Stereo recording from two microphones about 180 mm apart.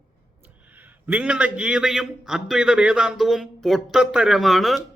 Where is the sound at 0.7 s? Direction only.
10° right (ahead or behind).